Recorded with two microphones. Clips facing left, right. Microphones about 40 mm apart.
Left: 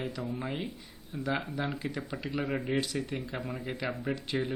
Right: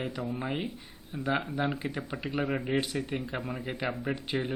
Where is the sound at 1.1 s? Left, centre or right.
Centre.